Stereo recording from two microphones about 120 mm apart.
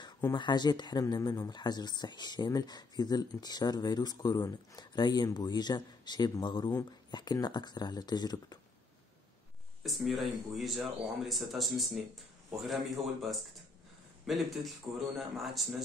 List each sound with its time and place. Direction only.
0.3 s speech: 35° left (ahead or behind)
9.8 s speech: centre (ahead or behind)